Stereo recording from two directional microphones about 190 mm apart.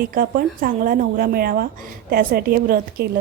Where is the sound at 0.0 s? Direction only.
50° right (ahead or behind).